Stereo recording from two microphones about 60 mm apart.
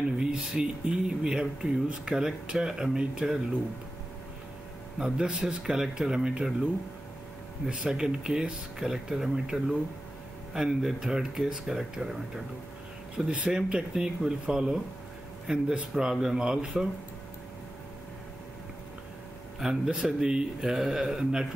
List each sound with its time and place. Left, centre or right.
0.2 s speech: centre
4.9 s speech: centre
7.7 s speech: centre
13.2 s speech: centre
19.6 s speech: centre